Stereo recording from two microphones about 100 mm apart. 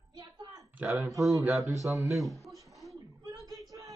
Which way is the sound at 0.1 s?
40° right (ahead or behind).